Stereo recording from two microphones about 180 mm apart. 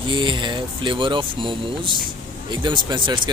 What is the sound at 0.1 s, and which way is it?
Speech, 25° right (ahead or behind).